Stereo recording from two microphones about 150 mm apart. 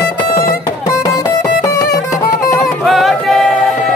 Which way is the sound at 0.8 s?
20° left (ahead or behind).